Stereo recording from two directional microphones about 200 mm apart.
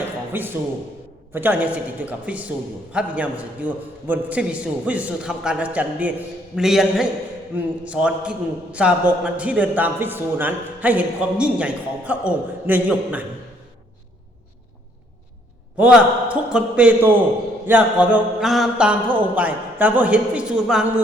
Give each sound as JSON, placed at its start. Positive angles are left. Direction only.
{"t": 0.3, "sound": "a man's voice", "side_deg": -10}
{"t": 15.8, "sound": "a man's voice", "side_deg": -5}